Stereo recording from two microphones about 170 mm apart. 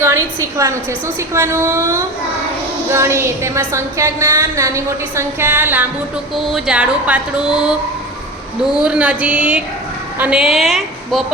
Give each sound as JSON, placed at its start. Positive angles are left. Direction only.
{"t": 0.0, "sound": "a woman's voice", "side_deg": -15}